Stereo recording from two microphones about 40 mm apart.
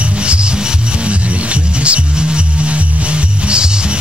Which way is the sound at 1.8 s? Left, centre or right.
Right.